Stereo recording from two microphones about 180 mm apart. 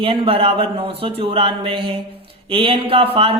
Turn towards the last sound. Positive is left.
turn(degrees=-30)  # may be behind; listen again after turning